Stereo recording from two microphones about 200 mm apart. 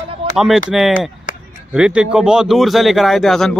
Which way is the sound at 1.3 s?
40° left (ahead or behind).